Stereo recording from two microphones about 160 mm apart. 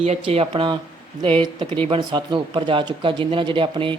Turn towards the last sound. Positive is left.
turn(degrees=-30)  # may be behind; listen again after turning